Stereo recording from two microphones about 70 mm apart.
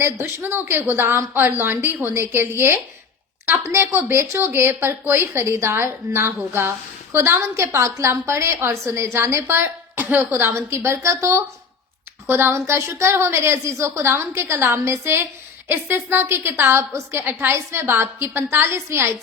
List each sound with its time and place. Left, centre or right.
0.0 s a woman's voice: right
10.5 s a woman's voice: right